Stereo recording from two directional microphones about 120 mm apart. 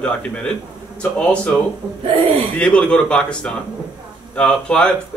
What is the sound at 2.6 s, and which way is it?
A man's voice, 10° left (ahead or behind).